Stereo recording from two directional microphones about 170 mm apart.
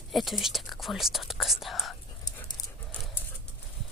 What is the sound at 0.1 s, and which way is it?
Speech, centre (ahead or behind).